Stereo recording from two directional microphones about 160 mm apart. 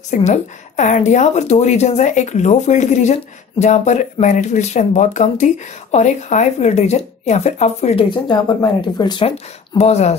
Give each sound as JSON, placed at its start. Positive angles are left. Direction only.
{"t": 0.1, "sound": "a woman's voice", "side_deg": 45}
{"t": 8.3, "sound": "speech", "side_deg": 25}
{"t": 9.8, "sound": "a woman's voice", "side_deg": 40}